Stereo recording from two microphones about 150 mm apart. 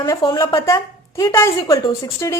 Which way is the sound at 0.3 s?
20° left (ahead or behind).